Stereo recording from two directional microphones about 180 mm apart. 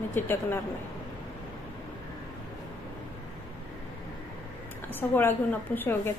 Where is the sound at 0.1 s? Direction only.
10° left (ahead or behind).